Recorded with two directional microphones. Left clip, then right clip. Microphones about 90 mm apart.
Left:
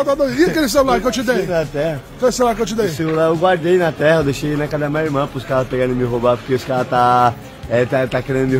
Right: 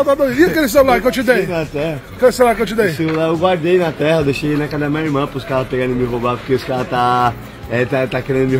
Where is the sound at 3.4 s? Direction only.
40° left (ahead or behind).